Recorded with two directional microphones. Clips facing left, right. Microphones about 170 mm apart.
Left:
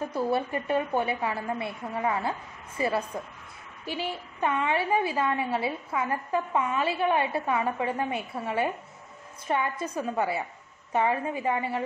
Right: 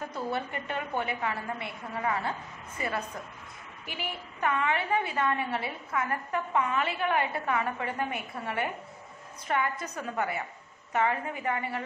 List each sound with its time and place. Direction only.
0.1 s a woman's voice: 30° left (ahead or behind)